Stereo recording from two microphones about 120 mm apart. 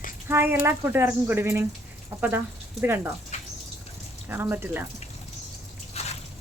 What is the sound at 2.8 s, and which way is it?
Speech, 20° right (ahead or behind).